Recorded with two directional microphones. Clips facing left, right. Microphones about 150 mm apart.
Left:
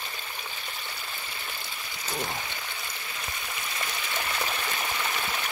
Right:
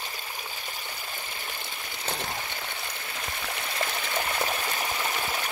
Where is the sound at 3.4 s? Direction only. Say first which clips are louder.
Right 6 dB; 60° right (ahead or behind).